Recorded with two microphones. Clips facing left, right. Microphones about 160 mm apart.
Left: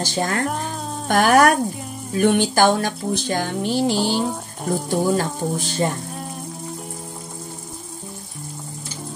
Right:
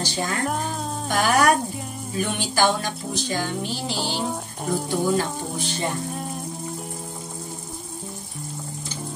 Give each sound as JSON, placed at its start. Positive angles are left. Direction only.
{"t": 0.0, "sound": "speech", "side_deg": 50}